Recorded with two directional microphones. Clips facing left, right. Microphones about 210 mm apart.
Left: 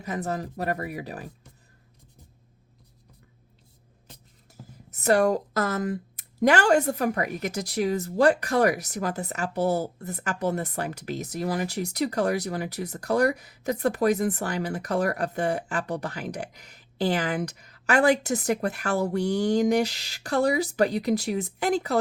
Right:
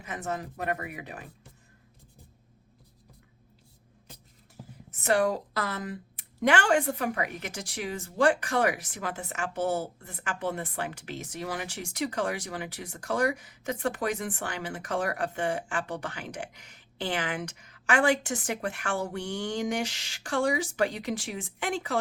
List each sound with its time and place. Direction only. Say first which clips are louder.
0.0 s a woman's voice: left 4 dB; 35° left (ahead or behind)
4.9 s a woman's voice: left 4 dB; 40° left (ahead or behind)